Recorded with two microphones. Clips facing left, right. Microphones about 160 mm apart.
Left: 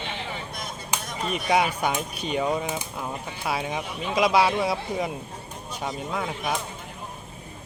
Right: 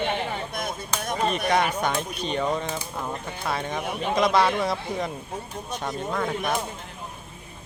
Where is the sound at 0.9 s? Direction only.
15° left (ahead or behind).